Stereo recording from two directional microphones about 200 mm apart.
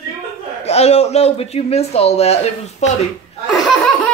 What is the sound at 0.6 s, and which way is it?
A man's voice, 30° left (ahead or behind).